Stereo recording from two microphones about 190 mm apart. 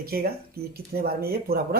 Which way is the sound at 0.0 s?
50° right (ahead or behind).